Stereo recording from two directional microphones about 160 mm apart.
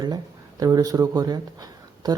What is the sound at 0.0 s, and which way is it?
Speech, 25° right (ahead or behind).